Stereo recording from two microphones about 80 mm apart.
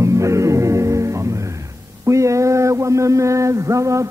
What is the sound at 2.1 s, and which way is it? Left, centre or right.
Mantra, right.